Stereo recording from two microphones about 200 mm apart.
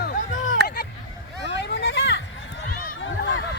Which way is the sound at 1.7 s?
65° left (ahead or behind).